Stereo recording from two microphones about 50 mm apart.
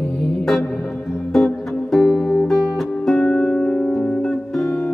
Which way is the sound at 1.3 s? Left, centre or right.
Centre.